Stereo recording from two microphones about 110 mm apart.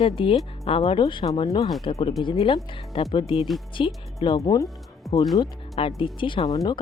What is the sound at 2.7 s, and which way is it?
Speech, 65° left (ahead or behind).